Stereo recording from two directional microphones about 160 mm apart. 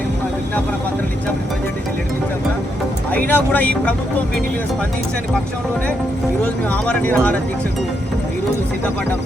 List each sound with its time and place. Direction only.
3.1 s speech: 10° left (ahead or behind)
6.7 s speech: 10° left (ahead or behind)